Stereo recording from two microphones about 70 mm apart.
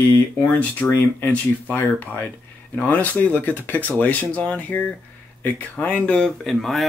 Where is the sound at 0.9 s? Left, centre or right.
Left.